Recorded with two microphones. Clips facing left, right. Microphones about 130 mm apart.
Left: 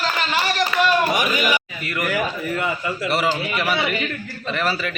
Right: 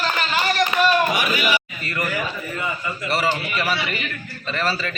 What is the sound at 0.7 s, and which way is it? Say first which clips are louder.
Speech: even; 15° right (ahead or behind).